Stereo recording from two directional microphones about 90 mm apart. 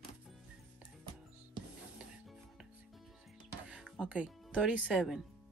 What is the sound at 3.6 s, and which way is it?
Music, 10° right (ahead or behind).